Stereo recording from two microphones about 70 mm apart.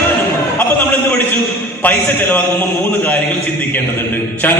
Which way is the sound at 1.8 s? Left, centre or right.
Left.